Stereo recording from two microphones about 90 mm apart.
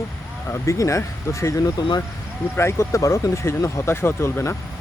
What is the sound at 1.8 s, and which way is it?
Speech, 50° left (ahead or behind).